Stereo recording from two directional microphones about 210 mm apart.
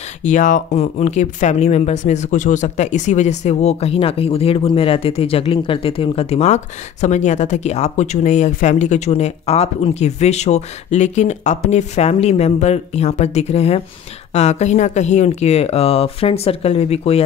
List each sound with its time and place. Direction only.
0.2 s speech: 35° left (ahead or behind)